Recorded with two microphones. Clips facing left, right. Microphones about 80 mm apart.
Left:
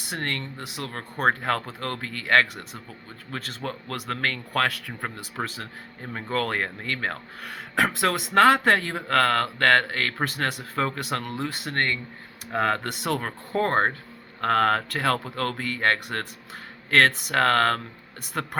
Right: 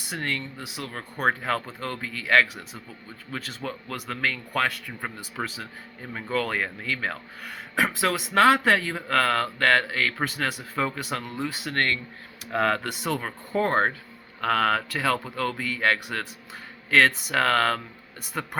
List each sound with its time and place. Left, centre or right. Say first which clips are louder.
0.1 s speech: even; left
5.4 s speech: left 1 dB; left
6.3 s speech: even; left
11.7 s speech: right 1 dB; left
13.0 s speech: left 1 dB; left
13.7 s speech: left 1 dB; left